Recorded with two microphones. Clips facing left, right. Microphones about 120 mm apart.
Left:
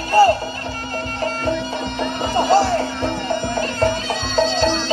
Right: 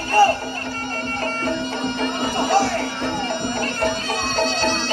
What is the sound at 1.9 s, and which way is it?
Music, 20° left (ahead or behind).